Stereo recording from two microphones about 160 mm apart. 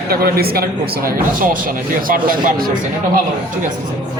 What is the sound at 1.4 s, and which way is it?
A man's voice, 60° right (ahead or behind).